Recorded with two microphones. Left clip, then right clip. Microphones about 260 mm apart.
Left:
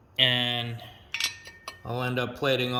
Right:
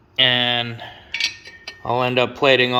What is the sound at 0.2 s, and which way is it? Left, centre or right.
Cutlery, centre.